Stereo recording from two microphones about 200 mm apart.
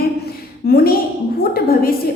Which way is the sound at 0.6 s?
50° left (ahead or behind).